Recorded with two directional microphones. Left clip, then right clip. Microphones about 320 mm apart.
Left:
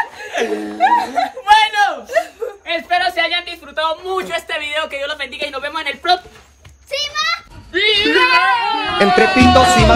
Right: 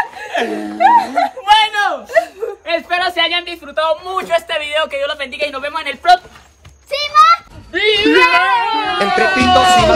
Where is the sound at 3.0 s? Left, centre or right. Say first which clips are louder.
Right 1 dB; centre.